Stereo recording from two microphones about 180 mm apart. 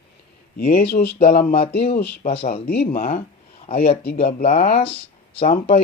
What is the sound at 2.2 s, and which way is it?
Speech, 35° left (ahead or behind).